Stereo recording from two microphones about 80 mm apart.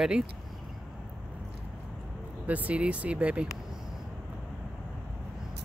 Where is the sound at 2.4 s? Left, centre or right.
Centre.